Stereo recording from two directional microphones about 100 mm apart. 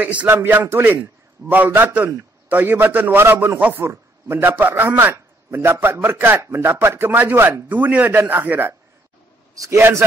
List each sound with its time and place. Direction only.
0.0 s a man's voice: 15° right (ahead or behind)